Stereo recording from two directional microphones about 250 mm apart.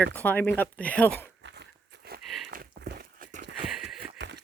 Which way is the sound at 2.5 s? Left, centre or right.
Right.